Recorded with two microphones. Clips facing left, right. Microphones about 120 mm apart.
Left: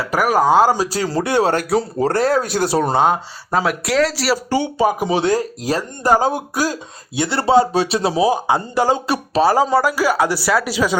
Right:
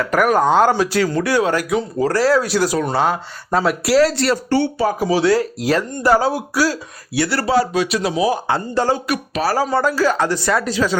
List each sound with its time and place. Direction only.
0.0 s speech: 5° left (ahead or behind)
0.8 s speech: 35° left (ahead or behind)
2.1 s speech: 50° left (ahead or behind)
2.6 s speech: 30° left (ahead or behind)
3.5 s speech: centre (ahead or behind); by 8.4 s 30° left (ahead or behind)
8.4 s speech: 15° left (ahead or behind)
9.0 s speech: 30° left (ahead or behind)
9.7 s speech: 10° left (ahead or behind)